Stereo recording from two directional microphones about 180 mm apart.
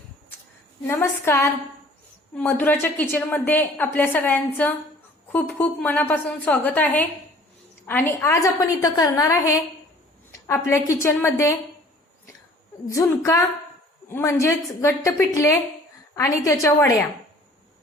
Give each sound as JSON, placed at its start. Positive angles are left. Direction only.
{"t": 0.9, "sound": "a woman's voice", "side_deg": 10}
{"t": 12.9, "sound": "a woman's voice", "side_deg": 20}